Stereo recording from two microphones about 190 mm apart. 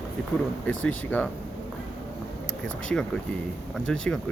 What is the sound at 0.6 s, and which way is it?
Speech, 5° left (ahead or behind).